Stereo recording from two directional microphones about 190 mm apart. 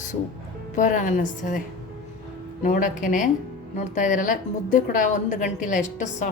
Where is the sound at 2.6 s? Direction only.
45° left (ahead or behind).